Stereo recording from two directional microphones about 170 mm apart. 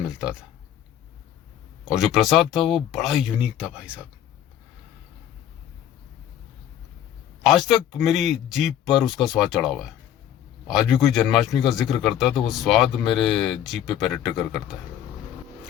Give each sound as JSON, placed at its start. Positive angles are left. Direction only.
{"t": 1.8, "sound": "a man's voice", "side_deg": 0}
{"t": 7.4, "sound": "a man's voice", "side_deg": 0}